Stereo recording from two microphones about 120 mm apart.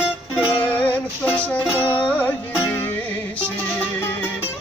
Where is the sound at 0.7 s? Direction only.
15° left (ahead or behind).